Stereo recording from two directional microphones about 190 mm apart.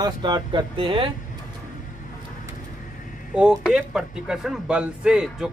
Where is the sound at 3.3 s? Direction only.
5° right (ahead or behind).